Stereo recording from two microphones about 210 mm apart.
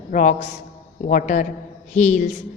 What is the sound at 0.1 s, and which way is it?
A woman's voice, 35° left (ahead or behind).